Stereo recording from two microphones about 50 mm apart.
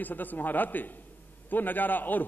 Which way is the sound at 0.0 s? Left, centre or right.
Left.